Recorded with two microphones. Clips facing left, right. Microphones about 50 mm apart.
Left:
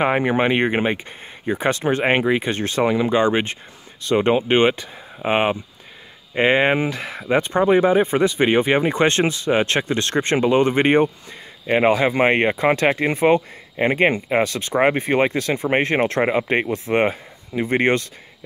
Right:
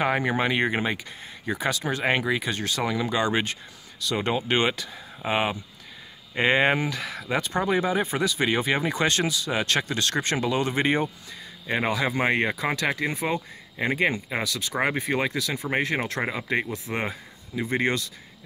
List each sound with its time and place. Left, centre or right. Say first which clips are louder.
0.0 s speech: left 6 dB; left